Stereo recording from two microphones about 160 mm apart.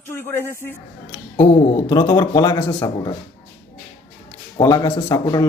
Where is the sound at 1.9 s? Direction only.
25° left (ahead or behind).